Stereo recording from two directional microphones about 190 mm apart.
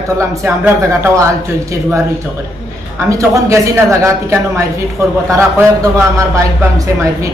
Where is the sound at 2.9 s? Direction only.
15° right (ahead or behind).